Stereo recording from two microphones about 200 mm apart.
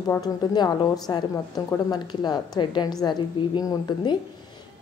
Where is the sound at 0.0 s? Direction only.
20° left (ahead or behind).